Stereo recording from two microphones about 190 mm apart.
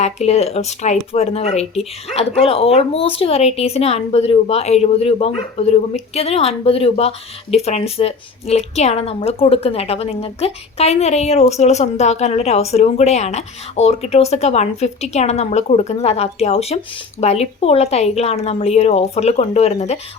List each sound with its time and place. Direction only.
0.0 s a woman's voice: 35° left (ahead or behind)